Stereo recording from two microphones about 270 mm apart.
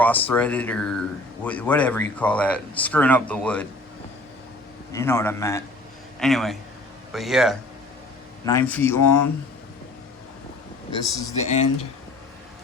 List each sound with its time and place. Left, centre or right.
0.0 s speech: centre
4.9 s a man's voice: centre
11.4 s speech: left